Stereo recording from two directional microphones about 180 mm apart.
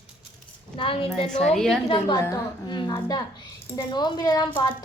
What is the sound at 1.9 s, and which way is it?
A woman's voice, 25° left (ahead or behind).